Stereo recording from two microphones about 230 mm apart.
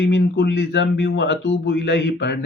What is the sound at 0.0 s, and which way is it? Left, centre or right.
Speech, left.